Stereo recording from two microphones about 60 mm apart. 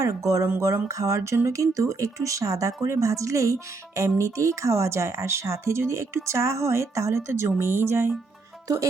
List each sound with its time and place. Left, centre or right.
0.0 s speech: right
8.6 s speech: right